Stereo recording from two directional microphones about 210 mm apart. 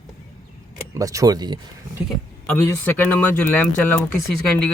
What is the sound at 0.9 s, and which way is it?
Speech, 15° right (ahead or behind).